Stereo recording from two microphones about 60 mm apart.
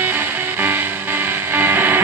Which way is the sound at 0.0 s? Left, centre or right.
Right.